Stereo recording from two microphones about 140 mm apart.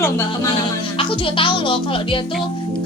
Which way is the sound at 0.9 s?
40° left (ahead or behind).